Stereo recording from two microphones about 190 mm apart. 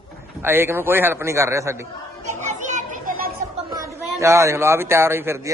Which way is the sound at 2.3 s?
40° right (ahead or behind).